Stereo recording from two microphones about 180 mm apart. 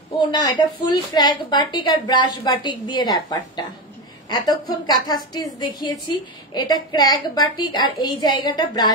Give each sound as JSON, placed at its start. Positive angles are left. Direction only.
{"t": 0.2, "sound": "a woman's voice", "side_deg": 20}